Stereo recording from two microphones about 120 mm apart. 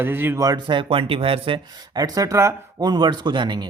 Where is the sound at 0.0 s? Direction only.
15° right (ahead or behind).